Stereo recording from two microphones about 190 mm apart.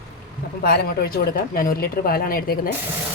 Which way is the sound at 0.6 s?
55° left (ahead or behind).